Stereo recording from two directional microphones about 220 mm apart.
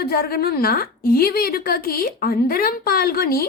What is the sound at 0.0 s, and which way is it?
A woman's voice, 45° left (ahead or behind).